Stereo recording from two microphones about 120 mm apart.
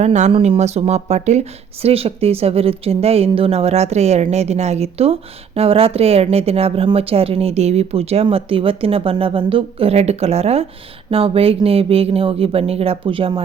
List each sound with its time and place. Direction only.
0.0 s speech: 80° right
0.3 s speech: 50° right (ahead or behind)